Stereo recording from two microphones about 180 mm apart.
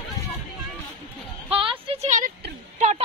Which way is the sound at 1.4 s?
30° right (ahead or behind).